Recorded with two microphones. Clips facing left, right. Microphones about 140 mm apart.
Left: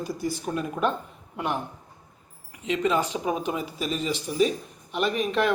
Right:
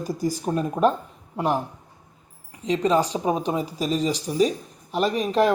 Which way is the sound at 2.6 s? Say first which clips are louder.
Right 4 dB; 35° right (ahead or behind).